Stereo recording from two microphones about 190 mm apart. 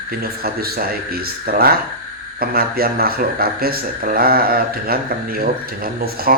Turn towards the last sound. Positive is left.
turn(degrees=-50)  # may be behind; listen again after turning